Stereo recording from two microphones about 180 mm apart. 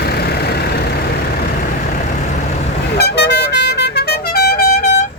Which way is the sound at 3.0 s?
70° left (ahead or behind).